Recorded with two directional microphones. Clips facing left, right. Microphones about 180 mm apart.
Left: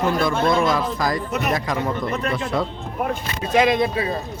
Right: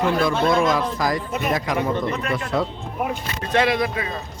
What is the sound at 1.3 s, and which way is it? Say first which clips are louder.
Speech: left 1 dB; 75° left (ahead or behind).